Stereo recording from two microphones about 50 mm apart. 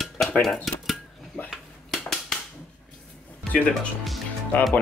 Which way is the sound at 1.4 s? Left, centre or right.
Centre.